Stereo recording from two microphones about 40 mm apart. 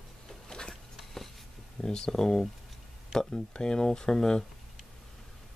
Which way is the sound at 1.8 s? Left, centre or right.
Centre.